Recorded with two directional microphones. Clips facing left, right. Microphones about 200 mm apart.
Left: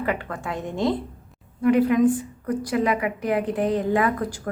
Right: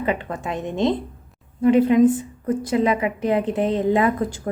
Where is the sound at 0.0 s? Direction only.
20° right (ahead or behind).